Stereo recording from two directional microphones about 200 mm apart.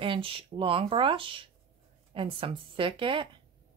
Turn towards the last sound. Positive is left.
turn(degrees=-25)  # may be behind; listen again after turning